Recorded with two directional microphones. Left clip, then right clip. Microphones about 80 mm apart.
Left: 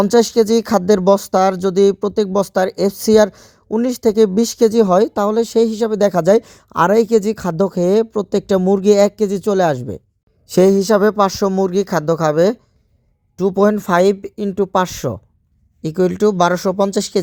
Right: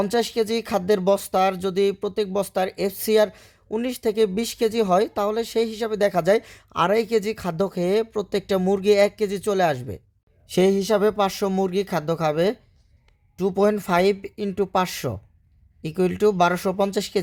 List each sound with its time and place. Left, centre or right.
0.0 s speech: left
8.6 s speech: left
8.9 s speech: left
10.4 s speech: left
11.7 s speech: left
13.3 s speech: left